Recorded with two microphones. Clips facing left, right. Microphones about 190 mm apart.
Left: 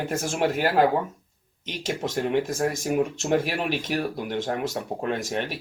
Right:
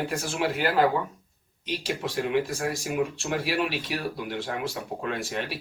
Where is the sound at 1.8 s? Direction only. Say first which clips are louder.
Left 3 dB; 45° left (ahead or behind).